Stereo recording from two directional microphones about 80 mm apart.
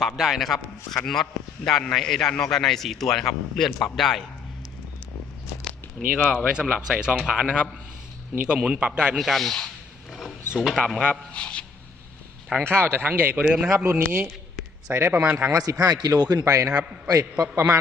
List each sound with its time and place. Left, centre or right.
0.0 s a man's voice: centre
6.1 s a man's voice: centre
9.1 s a man's voice: centre
10.1 s a sound: centre
10.5 s a man's voice: centre
11.3 s speech: centre
12.5 s speech: right; by 13.8 s centre
13.9 s speech: right
15.4 s a man's voice: right
15.8 s a man's voice: right